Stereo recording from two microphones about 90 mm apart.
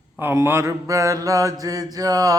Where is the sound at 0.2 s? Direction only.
25° right (ahead or behind).